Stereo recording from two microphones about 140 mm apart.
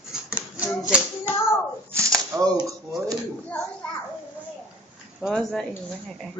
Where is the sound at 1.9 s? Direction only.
20° right (ahead or behind).